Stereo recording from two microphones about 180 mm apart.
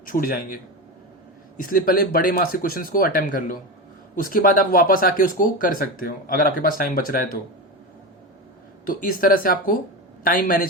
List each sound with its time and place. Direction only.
0.0 s speech: 50° left (ahead or behind)
1.7 s speech: 55° left (ahead or behind)
8.9 s speech: 50° left (ahead or behind)